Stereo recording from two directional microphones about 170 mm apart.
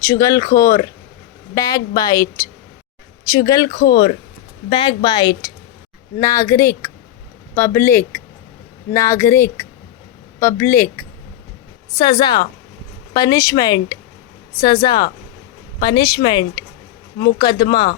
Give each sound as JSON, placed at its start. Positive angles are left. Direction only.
{"t": 0.0, "sound": "a woman's voice", "side_deg": 20}
{"t": 3.7, "sound": "speech", "side_deg": 60}
{"t": 4.7, "sound": "a woman's voice", "side_deg": 30}
{"t": 12.0, "sound": "a woman's voice", "side_deg": 25}